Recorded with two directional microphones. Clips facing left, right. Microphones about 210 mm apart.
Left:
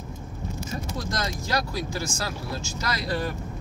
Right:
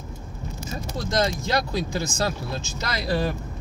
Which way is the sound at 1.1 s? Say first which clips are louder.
Right 6 dB; 25° right (ahead or behind).